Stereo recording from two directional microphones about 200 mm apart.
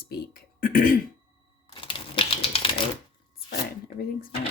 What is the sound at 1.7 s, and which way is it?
Typewriter, 25° left (ahead or behind).